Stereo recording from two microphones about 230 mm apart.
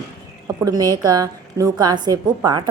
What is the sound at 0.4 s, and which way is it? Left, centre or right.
A woman's voice, centre.